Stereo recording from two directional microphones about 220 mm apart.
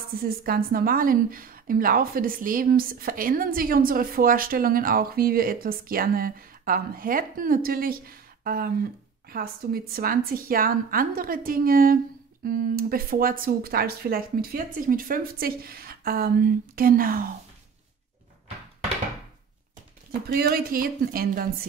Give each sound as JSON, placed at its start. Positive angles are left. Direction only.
{"t": 0.2, "sound": "a woman's voice", "side_deg": -40}
{"t": 20.1, "sound": "a woman's voice", "side_deg": -45}